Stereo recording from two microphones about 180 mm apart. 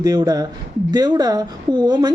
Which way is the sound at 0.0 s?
20° right (ahead or behind).